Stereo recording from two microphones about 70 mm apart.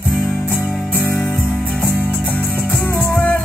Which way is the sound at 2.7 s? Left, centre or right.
Centre.